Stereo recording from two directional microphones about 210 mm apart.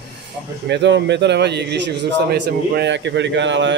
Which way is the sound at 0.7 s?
55° right (ahead or behind).